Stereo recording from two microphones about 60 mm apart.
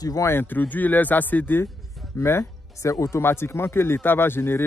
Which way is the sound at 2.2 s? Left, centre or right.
Left.